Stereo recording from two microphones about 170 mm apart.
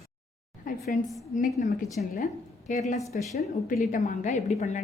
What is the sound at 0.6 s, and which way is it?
A woman's voice, 55° left (ahead or behind).